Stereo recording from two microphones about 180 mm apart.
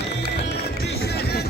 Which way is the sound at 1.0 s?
60° left (ahead or behind).